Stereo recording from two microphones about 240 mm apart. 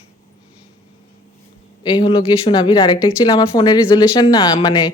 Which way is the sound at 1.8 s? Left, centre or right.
Centre.